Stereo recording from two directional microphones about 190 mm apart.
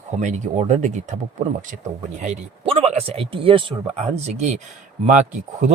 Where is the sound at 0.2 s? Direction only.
40° right (ahead or behind).